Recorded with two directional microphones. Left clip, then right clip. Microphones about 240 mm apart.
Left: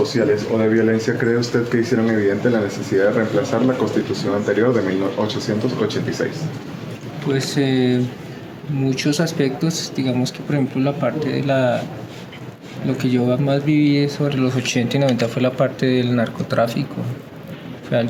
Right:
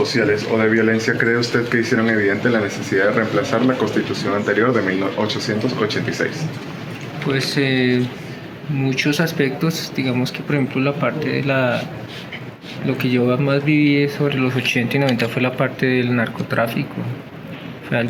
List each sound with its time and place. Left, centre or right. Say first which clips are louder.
0.0 s speech: even; centre
5.8 s speech: right 1 dB; centre
7.3 s speech: right 1 dB; centre
12.9 s speech: right 1 dB; centre
17.9 s speech: left 1 dB; centre